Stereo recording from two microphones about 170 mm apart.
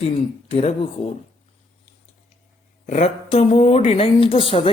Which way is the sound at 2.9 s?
40° left (ahead or behind).